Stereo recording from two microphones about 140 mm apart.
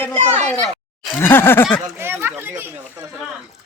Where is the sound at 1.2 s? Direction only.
15° left (ahead or behind).